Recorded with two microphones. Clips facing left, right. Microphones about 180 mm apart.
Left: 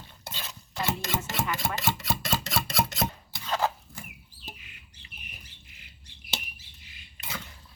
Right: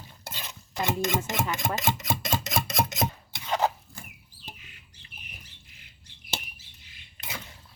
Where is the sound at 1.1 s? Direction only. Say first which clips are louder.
Right 3 dB; 15° right (ahead or behind).